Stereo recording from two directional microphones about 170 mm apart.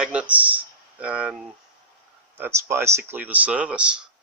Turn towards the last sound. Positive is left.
turn(degrees=-5)  # may be behind; listen again after turning